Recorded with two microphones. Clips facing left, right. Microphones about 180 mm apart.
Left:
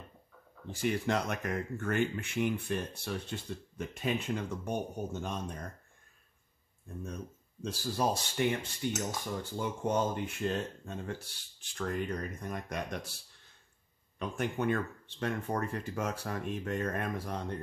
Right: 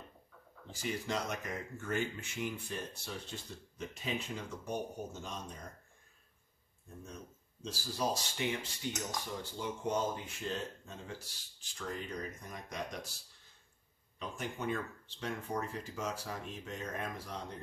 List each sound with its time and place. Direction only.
0.7 s speech: 60° left (ahead or behind)
7.6 s speech: 55° left (ahead or behind)
8.8 s cutlery: 50° left (ahead or behind)
9.4 s speech: 55° left (ahead or behind)
14.1 s speech: 60° left (ahead or behind)